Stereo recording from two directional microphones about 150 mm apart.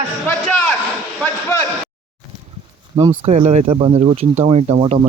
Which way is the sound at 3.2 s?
45° right (ahead or behind).